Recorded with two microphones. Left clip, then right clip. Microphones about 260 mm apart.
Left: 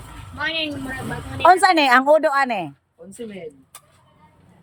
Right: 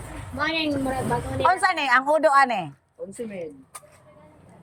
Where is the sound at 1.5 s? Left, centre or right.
Left.